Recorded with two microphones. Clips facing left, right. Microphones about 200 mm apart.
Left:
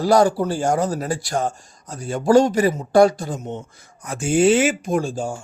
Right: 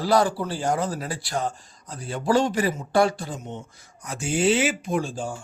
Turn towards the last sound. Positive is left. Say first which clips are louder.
# left 4 dB
turn(degrees=45)  # may be behind; listen again after turning